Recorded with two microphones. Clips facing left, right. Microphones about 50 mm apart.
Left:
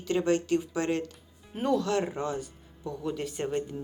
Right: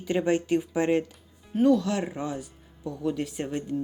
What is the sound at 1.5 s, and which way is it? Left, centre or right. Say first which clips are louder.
Speech: right 5 dB; centre.